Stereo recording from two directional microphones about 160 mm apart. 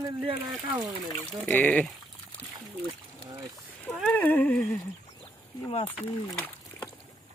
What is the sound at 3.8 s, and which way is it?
Speech, 5° left (ahead or behind).